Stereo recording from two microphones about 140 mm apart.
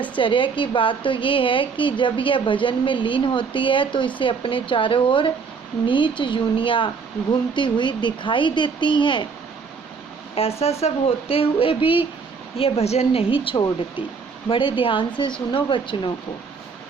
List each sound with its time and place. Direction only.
0.2 s a woman's voice: 35° left (ahead or behind)
10.3 s a woman's voice: 45° left (ahead or behind)